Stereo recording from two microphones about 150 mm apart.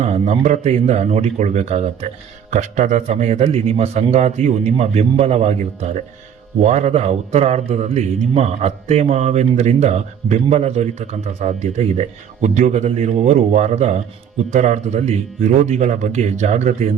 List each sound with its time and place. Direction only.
0.0 s a man's voice: 45° right (ahead or behind)